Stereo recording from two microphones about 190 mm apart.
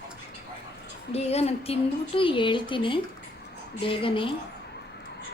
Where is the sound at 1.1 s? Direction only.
35° left (ahead or behind).